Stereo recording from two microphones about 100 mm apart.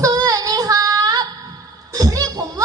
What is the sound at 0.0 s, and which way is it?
Female singing, 35° right (ahead or behind).